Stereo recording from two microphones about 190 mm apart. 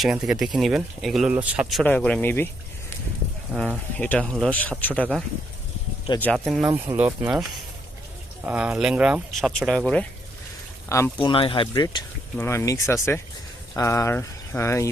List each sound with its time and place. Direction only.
0.0 s speech: 5° right (ahead or behind)
1.8 s speech: 5° left (ahead or behind)
3.5 s speech: 5° right (ahead or behind)
3.9 s speech: 5° left (ahead or behind)
6.7 s speech: 10° right (ahead or behind); by 10.1 s 5° left (ahead or behind)
10.8 s speech: 15° left (ahead or behind)
11.2 s speech: 25° left (ahead or behind)
12.4 s speech: 15° left (ahead or behind)